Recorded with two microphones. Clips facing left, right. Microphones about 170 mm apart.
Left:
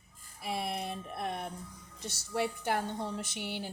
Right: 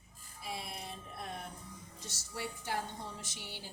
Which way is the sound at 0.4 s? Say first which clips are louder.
Left 8 dB; 65° left (ahead or behind).